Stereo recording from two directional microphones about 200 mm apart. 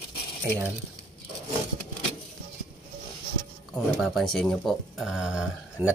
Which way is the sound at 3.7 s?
Centre (ahead or behind).